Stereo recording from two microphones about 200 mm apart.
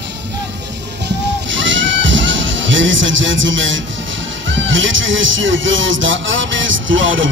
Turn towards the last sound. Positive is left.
turn(degrees=-70)  # may be behind; listen again after turning